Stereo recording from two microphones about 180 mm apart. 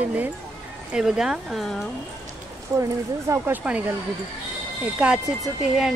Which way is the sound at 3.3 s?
10° right (ahead or behind).